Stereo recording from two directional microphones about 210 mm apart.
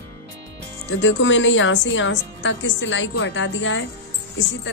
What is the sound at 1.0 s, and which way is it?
Speech, 65° left (ahead or behind).